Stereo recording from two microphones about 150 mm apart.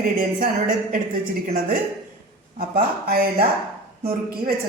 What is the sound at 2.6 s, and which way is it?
A woman's voice, 85° right.